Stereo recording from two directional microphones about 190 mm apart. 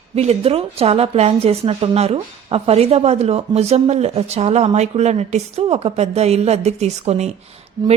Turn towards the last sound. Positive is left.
turn(degrees=-20)  # may be behind; listen again after turning